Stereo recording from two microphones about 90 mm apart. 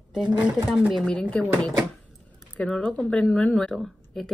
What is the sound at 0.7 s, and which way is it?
Speech, 10° right (ahead or behind).